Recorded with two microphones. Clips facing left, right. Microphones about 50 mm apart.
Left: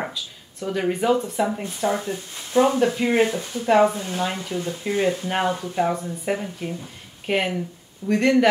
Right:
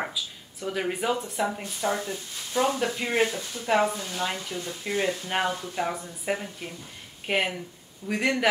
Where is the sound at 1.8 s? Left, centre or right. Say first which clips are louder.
Left 4 dB; left.